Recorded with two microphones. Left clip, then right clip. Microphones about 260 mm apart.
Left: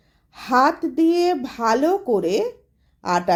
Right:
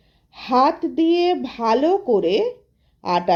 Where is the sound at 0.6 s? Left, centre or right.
Left.